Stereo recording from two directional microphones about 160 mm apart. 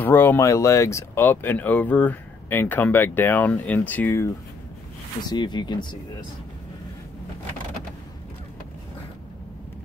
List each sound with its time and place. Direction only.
0.0 s speech: 10° left (ahead or behind)
5.2 s speech: 25° left (ahead or behind)